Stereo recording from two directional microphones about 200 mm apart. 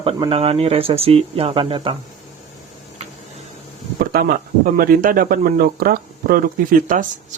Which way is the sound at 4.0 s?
50° right (ahead or behind).